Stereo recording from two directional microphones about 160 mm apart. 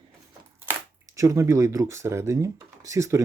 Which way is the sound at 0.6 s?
15° right (ahead or behind).